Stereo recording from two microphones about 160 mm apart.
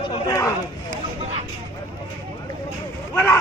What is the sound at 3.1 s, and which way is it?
Speech, 15° left (ahead or behind).